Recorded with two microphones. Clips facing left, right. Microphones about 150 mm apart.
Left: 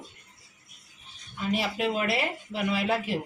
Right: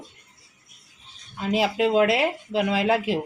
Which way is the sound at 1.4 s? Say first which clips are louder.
Right 6 dB; 90° right.